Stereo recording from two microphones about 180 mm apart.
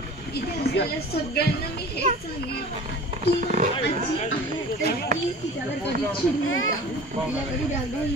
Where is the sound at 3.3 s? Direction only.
45° right (ahead or behind).